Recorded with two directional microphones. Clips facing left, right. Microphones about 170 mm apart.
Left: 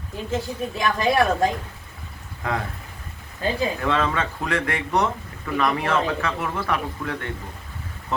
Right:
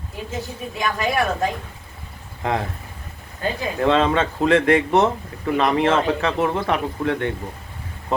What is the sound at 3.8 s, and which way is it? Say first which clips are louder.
Speech: right 10 dB; 25° right (ahead or behind).